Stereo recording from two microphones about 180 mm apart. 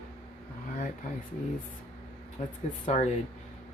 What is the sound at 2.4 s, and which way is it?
Speech, 40° left (ahead or behind).